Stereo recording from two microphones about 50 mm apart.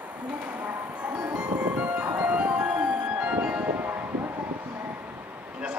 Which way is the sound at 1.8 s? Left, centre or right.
Right.